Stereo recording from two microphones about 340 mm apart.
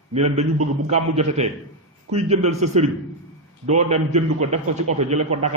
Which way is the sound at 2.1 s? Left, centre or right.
Centre.